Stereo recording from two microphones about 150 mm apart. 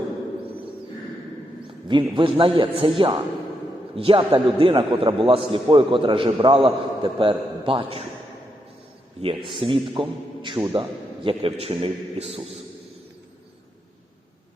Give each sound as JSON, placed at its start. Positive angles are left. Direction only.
{"t": 1.6, "sound": "a man's voice", "side_deg": -35}
{"t": 9.2, "sound": "a man's voice", "side_deg": -35}